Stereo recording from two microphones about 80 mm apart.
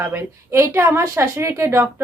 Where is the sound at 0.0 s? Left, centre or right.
Right.